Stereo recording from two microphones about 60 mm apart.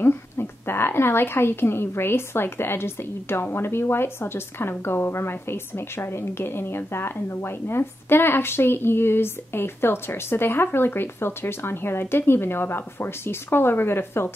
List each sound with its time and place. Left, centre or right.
0.0 s a woman's voice: left